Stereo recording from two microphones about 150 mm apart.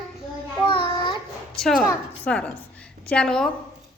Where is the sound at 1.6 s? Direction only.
Centre (ahead or behind).